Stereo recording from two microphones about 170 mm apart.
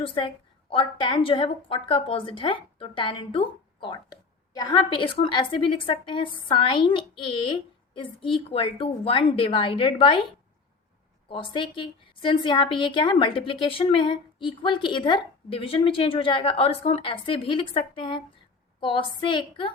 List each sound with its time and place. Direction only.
0.0 s a woman's voice: 30° left (ahead or behind)